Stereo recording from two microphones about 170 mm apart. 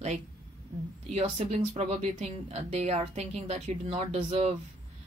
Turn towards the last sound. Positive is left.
turn(degrees=-35)  # may be behind; listen again after turning